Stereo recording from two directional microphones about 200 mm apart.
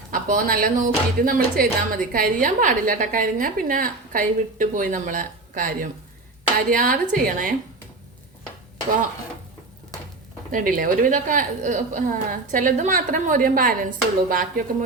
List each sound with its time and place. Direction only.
0.1 s a woman's voice: 45° right (ahead or behind)
10.5 s a woman's voice: 45° right (ahead or behind)